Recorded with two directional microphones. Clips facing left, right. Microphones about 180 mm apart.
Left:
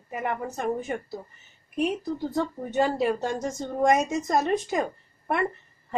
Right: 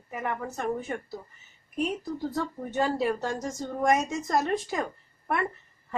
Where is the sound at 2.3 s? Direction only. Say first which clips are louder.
Left 3 dB; 20° left (ahead or behind).